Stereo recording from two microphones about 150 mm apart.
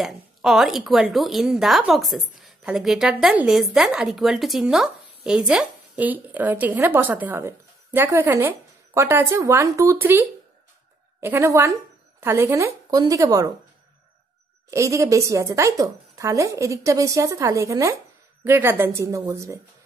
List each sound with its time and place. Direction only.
0.0 s a woman's voice: centre (ahead or behind); by 13.5 s 20° right (ahead or behind)
14.7 s a woman's voice: 20° right (ahead or behind)